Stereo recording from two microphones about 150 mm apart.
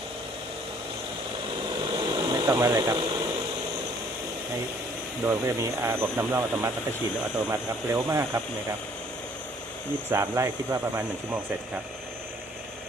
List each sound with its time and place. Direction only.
1.8 s a sound: 30° right (ahead or behind)
5.2 s speech: 15° right (ahead or behind)
10.1 s speech: 20° right (ahead or behind)